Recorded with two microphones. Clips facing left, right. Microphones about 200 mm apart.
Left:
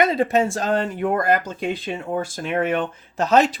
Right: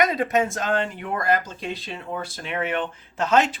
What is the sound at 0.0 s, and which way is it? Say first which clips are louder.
Speech: left 3 dB; 25° left (ahead or behind).